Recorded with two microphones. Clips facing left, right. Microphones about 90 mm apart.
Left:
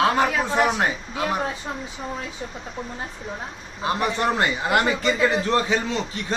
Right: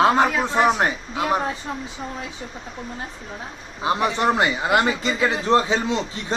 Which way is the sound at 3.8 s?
20° right (ahead or behind).